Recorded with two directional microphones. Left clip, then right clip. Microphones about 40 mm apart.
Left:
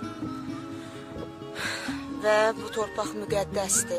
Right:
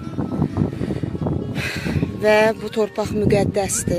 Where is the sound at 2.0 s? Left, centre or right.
Left.